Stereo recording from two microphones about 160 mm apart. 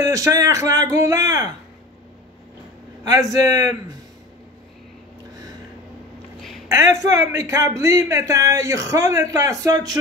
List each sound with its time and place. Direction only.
0.0 s speech: 20° right (ahead or behind)
3.0 s speech: 20° right (ahead or behind)
6.7 s speech: 20° right (ahead or behind)